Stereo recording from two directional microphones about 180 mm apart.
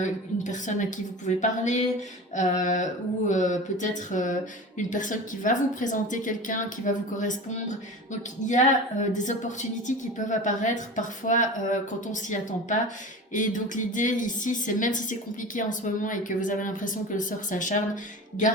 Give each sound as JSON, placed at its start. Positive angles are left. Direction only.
{"t": 0.0, "sound": "speech", "side_deg": 45}
{"t": 9.1, "sound": "speech", "side_deg": 45}